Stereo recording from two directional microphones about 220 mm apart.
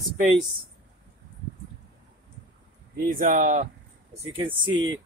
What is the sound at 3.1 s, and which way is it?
Speech, 35° right (ahead or behind).